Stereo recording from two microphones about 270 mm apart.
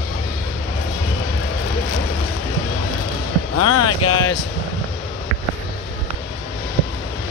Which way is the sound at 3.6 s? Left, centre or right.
Left.